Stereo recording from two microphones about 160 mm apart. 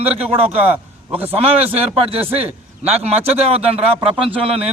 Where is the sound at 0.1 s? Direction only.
40° right (ahead or behind).